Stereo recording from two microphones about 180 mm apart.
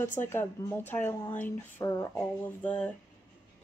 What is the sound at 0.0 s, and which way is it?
Speech, 10° left (ahead or behind).